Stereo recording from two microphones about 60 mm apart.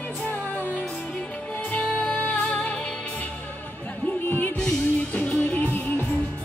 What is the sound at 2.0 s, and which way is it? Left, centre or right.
Music, left.